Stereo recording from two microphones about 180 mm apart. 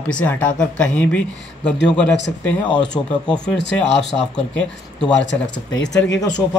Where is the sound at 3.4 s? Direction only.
75° left (ahead or behind).